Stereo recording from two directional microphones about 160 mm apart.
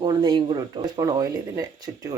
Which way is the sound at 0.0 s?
30° right (ahead or behind).